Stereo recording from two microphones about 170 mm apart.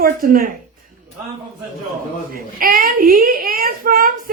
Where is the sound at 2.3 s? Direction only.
55° right (ahead or behind).